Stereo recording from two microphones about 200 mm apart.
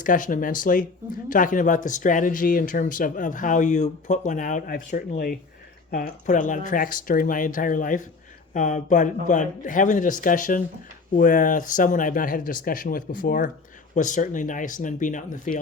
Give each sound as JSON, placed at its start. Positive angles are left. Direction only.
{"t": 0.0, "sound": "speech", "side_deg": 40}